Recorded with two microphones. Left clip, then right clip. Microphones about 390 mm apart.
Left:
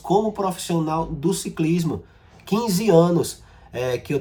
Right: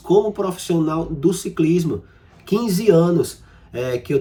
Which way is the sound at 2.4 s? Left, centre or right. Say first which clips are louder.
Right 4 dB; left.